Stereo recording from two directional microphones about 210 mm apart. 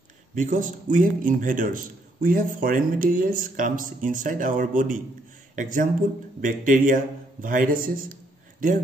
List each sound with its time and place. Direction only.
0.4 s a man's voice: 40° right (ahead or behind)